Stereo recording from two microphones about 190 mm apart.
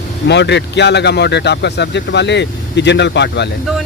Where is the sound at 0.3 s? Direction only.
65° left (ahead or behind).